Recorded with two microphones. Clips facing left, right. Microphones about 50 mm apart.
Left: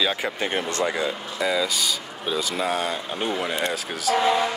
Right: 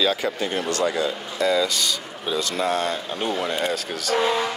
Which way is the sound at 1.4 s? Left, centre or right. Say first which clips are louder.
Right 2 dB; centre.